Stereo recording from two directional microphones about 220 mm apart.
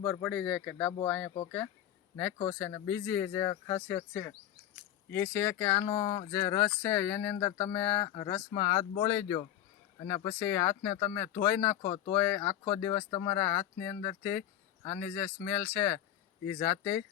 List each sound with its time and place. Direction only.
0.0 s speech: 10° left (ahead or behind)
11.8 s speech: 25° left (ahead or behind)
12.1 s speech: 10° left (ahead or behind)